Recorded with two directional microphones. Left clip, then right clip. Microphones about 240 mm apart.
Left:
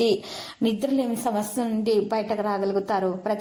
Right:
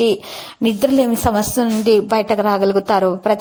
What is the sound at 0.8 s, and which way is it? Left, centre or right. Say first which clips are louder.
A woman's voice: right 14 dB; right.